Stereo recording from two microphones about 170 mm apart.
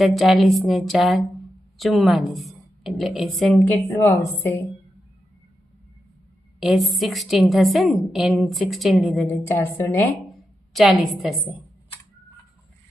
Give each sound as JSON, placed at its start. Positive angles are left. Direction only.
{"t": 0.0, "sound": "a woman's voice", "side_deg": 0}
{"t": 6.6, "sound": "a woman's voice", "side_deg": 0}
{"t": 9.2, "sound": "a woman's voice", "side_deg": 15}
{"t": 10.8, "sound": "a woman's voice", "side_deg": 0}